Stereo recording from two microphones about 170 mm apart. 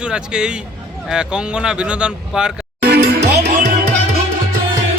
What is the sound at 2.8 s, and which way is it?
Music, 75° right (ahead or behind).